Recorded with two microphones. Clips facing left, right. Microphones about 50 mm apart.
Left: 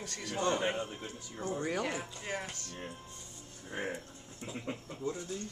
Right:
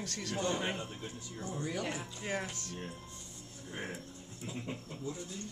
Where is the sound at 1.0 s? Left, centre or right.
Left.